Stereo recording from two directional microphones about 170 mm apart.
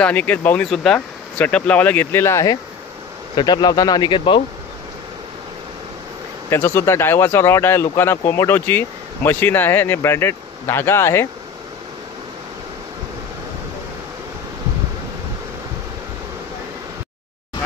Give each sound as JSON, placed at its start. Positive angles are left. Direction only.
{"t": 0.0, "sound": "a man's voice", "side_deg": 10}
{"t": 6.5, "sound": "speech", "side_deg": 15}